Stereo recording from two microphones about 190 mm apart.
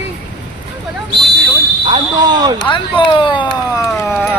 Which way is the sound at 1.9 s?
25° right (ahead or behind).